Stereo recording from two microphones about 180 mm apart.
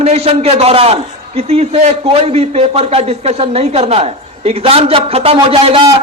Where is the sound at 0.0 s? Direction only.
35° right (ahead or behind).